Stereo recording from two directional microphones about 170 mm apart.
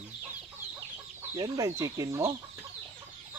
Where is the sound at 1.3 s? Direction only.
20° right (ahead or behind).